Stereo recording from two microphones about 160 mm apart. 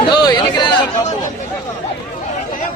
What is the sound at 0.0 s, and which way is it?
Chatter, 25° left (ahead or behind).